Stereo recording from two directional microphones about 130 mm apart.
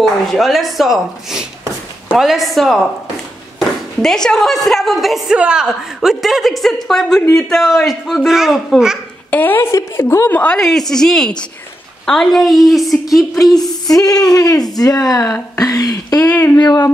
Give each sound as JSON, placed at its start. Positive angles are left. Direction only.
{"t": 0.0, "sound": "a woman's voice", "side_deg": 0}
{"t": 4.0, "sound": "a woman's voice", "side_deg": 5}
{"t": 9.3, "sound": "speech", "side_deg": 15}
{"t": 10.4, "sound": "a woman's voice", "side_deg": 5}
{"t": 13.8, "sound": "speech", "side_deg": 30}
{"t": 16.3, "sound": "speech", "side_deg": 15}
{"t": 16.5, "sound": "a sound", "side_deg": 30}